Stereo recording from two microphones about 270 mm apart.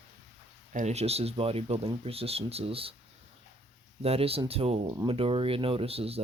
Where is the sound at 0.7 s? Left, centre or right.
Right.